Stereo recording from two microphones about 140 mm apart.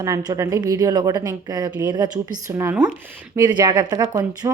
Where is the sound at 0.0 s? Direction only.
25° right (ahead or behind).